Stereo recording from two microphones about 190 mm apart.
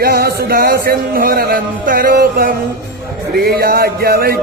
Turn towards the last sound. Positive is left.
turn(degrees=-55)  # may be behind; listen again after turning